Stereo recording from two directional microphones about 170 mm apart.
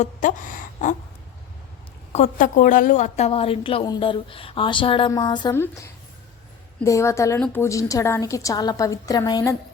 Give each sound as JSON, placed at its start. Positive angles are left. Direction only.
{"t": 0.0, "sound": "speech", "side_deg": 50}
{"t": 2.1, "sound": "a woman's voice", "side_deg": 45}
{"t": 6.8, "sound": "a woman's voice", "side_deg": 15}